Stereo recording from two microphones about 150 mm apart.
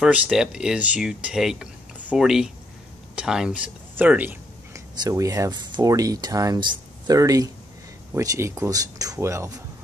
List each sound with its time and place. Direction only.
0.0 s speech: 5° right (ahead or behind)
5.0 s speech: 20° right (ahead or behind)